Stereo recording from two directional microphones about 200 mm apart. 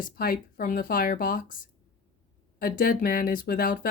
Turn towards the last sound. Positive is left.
turn(degrees=45)  # may be behind; listen again after turning